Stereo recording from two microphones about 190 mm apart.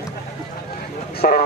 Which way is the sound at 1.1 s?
50° left (ahead or behind).